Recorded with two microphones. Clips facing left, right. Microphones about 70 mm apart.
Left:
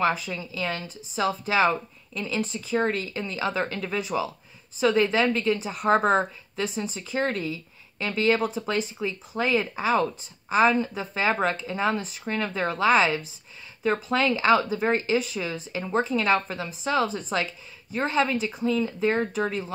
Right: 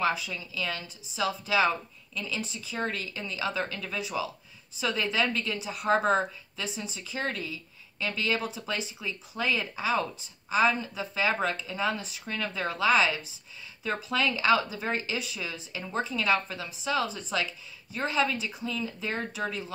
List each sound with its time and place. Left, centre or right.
0.0 s a woman's voice: left